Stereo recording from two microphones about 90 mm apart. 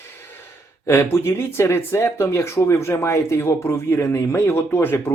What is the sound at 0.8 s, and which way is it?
Speech, 30° left (ahead or behind).